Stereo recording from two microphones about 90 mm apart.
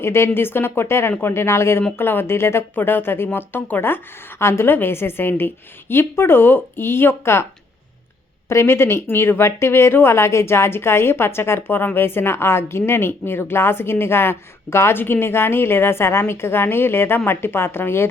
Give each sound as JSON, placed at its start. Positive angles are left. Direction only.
{"t": 0.0, "sound": "a woman's voice", "side_deg": 30}
{"t": 8.4, "sound": "a woman's voice", "side_deg": 30}